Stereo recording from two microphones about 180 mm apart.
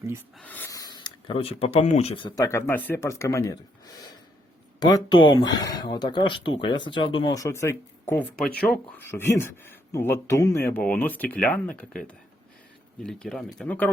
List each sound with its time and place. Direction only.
0.3 s speech: 10° left (ahead or behind)
4.8 s speech: 20° left (ahead or behind)